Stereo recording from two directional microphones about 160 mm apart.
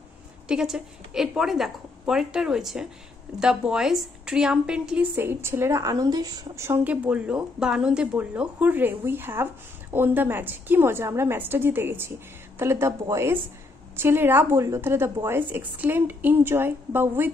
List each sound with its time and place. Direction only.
0.5 s a woman's voice: 5° right (ahead or behind)